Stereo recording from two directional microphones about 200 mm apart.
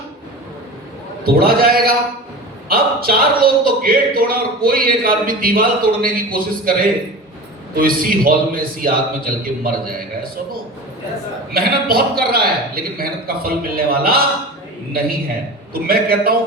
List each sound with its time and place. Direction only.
1.2 s a man's voice: 50° right (ahead or behind)
7.8 s a man's voice: 45° right (ahead or behind)
11.5 s a man's voice: 50° right (ahead or behind)
15.7 s a man's voice: 50° right (ahead or behind)